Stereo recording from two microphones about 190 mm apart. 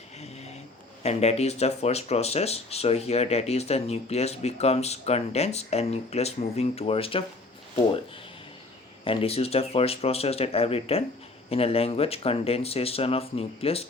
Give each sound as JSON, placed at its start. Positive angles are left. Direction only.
{"t": 1.0, "sound": "speech", "side_deg": 35}
{"t": 9.0, "sound": "speech", "side_deg": 30}